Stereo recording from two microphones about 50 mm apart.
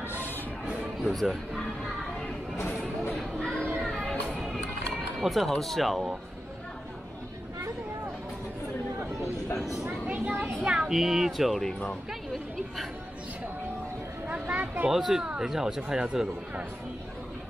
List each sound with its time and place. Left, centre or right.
0.7 s music: centre
1.3 s speech: centre
3.3 s a sound: centre
3.8 s music: centre
5.2 s speech: centre
9.6 s a sound: centre
10.0 s children playing: right
10.6 s speech: centre
14.4 s a sound: right
14.9 s speech: centre